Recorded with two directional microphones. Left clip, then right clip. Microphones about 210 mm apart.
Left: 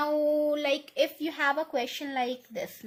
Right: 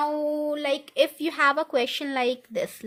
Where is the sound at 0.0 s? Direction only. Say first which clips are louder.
Even; 15° right (ahead or behind).